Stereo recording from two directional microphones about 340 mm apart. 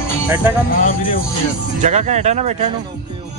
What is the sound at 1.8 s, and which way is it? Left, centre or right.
Speech, centre.